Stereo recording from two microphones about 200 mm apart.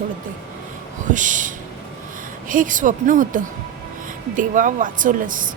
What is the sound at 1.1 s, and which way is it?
Speech, 40° right (ahead or behind).